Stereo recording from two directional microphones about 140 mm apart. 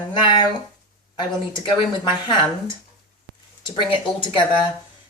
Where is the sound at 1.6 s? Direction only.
35° left (ahead or behind).